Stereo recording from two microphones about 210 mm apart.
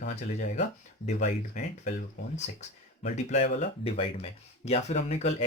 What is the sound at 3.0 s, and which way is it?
Speech, 30° left (ahead or behind).